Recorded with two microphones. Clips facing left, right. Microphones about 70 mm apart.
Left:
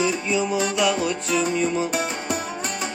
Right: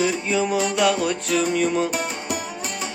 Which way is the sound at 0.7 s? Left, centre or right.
Right.